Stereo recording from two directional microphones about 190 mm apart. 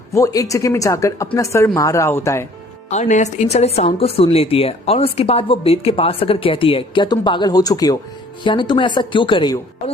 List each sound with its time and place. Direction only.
0.1 s speech: 15° left (ahead or behind)
2.9 s a woman's voice: 40° left (ahead or behind)